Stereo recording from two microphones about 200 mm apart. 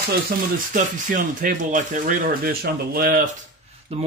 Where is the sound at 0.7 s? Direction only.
40° right (ahead or behind).